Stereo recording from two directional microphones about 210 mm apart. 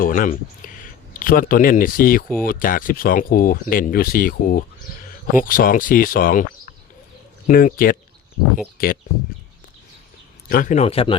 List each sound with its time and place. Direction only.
0.0 s speech: 40° left (ahead or behind)
10.5 s speech: 40° left (ahead or behind)